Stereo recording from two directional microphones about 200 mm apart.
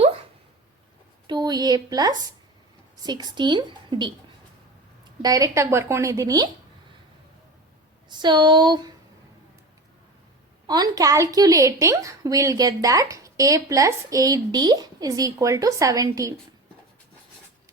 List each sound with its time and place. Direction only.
1.3 s a woman's voice: 20° right (ahead or behind)
5.2 s a woman's voice: 15° right (ahead or behind)
8.1 s a woman's voice: 20° right (ahead or behind)
10.7 s a woman's voice: 20° right (ahead or behind)